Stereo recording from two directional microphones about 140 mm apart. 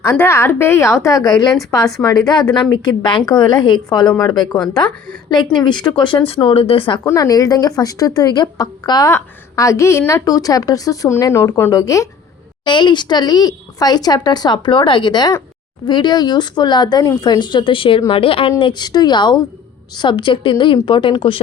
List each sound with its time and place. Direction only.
0.0 s a woman's voice: 20° left (ahead or behind)
4.5 s a woman's voice: 5° left (ahead or behind)
5.8 s a woman's voice: 35° left (ahead or behind)
7.0 s a woman's voice: 25° left (ahead or behind)
12.6 s a woman's voice: 35° left (ahead or behind)